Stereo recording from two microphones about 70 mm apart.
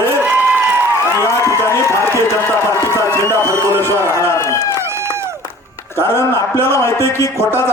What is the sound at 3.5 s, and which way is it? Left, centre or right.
Speech, right.